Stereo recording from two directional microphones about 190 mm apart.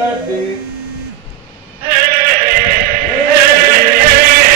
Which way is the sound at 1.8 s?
50° right (ahead or behind).